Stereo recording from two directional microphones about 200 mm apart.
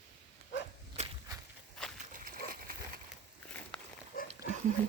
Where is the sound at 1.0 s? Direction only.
35° right (ahead or behind).